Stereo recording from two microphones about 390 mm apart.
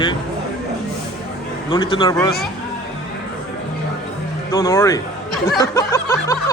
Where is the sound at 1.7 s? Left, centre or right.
Centre.